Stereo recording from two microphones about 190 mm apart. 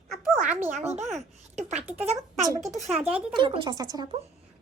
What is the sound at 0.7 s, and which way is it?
Speech, 35° right (ahead or behind).